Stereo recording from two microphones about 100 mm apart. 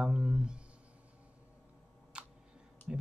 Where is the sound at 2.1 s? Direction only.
10° right (ahead or behind).